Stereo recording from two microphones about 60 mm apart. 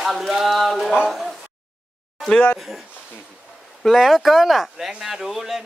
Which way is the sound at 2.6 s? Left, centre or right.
Centre.